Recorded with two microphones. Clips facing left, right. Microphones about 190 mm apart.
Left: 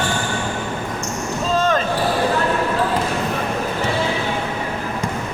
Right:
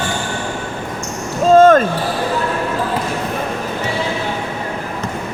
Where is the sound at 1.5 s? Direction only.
50° right (ahead or behind).